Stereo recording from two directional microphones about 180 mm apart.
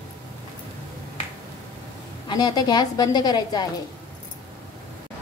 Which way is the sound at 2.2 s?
20° left (ahead or behind).